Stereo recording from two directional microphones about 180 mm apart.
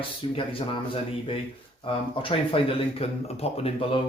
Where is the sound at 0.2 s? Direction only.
30° left (ahead or behind).